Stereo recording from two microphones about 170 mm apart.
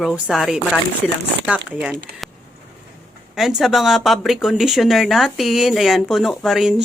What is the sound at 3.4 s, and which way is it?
Speech, centre (ahead or behind).